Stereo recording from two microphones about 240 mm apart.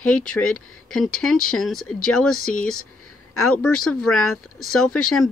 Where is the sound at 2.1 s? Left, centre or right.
Left.